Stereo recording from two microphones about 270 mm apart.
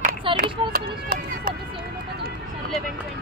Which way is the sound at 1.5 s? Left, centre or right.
Right.